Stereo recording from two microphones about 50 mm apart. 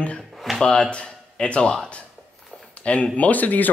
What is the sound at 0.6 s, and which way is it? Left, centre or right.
Speech, centre.